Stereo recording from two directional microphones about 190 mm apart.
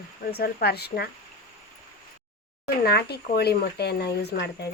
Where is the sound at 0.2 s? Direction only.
55° left (ahead or behind).